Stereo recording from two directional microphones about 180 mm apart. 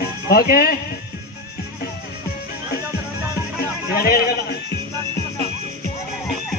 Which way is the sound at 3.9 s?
55° left (ahead or behind).